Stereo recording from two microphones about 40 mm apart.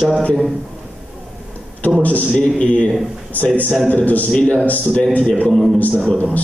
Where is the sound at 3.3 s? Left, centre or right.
Left.